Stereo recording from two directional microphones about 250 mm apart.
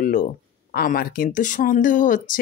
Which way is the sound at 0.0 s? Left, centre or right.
Left.